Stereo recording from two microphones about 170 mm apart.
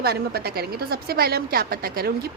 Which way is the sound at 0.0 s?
65° right (ahead or behind).